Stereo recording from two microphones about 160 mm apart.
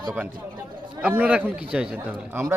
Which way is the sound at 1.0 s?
10° right (ahead or behind).